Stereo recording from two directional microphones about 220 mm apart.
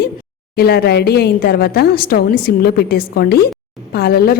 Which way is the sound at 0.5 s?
45° left (ahead or behind).